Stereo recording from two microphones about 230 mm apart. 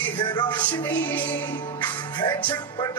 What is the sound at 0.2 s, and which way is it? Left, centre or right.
Music, centre.